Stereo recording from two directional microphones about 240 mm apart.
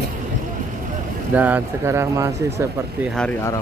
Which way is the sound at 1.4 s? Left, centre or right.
Centre.